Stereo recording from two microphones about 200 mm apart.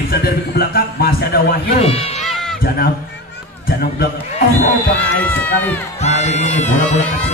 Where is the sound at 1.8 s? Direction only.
30° left (ahead or behind).